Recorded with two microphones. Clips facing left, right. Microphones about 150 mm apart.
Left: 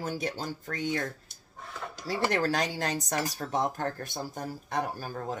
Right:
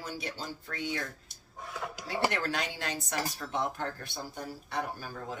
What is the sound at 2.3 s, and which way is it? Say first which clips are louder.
Speech: left 6 dB; 40° left (ahead or behind).